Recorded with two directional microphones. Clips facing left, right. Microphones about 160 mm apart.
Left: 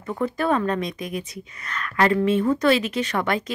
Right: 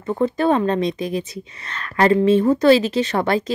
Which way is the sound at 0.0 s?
25° right (ahead or behind).